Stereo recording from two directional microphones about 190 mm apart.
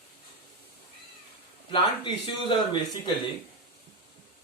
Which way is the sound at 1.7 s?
25° left (ahead or behind).